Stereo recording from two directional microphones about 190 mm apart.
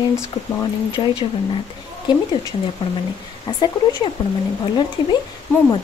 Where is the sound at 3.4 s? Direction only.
25° left (ahead or behind).